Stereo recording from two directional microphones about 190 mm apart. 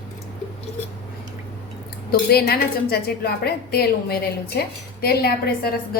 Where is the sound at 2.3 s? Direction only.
55° left (ahead or behind).